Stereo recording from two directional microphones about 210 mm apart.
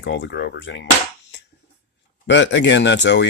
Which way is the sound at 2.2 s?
60° left (ahead or behind).